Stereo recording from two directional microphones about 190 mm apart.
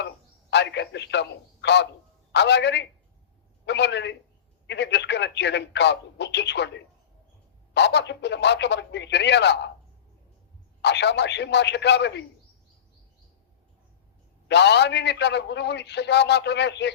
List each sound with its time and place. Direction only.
0.5 s a man's voice: 65° left (ahead or behind)
10.8 s a man's voice: 65° left (ahead or behind)
14.4 s a man's voice: 65° left (ahead or behind)